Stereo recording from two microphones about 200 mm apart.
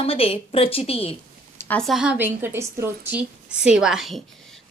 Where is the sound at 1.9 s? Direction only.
5° right (ahead or behind).